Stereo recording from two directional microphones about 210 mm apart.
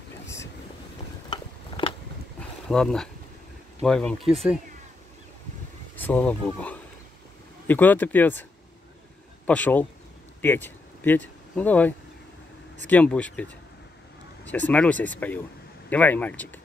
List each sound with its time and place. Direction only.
1.3 s a sound: 25° left (ahead or behind)
2.7 s speech: 5° left (ahead or behind)
5.9 s speech: 10° left (ahead or behind)
9.5 s speech: 5° left (ahead or behind)